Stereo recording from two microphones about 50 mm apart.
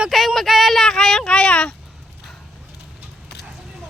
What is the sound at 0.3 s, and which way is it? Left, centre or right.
Child singing, centre.